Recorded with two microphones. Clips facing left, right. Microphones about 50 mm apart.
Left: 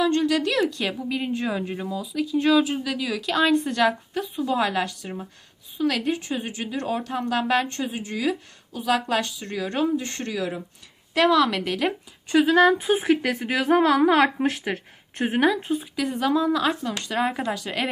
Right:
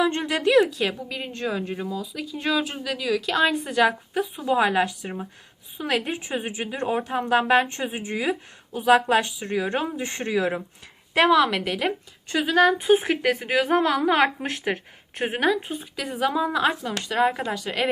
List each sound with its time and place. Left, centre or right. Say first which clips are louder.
0.0 s speech: left 1 dB; right
0.7 s a woman's voice: even; centre; by 11.3 s right
11.3 s a woman's voice: even; centre
12.3 s speech: left 2 dB; centre
12.9 s a woman's voice: right 1 dB; centre